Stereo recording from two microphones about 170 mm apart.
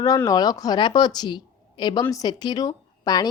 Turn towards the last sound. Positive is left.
turn(degrees=25)  # may be behind; listen again after turning